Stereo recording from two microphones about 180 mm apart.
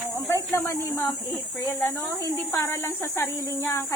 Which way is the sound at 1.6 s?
15° left (ahead or behind).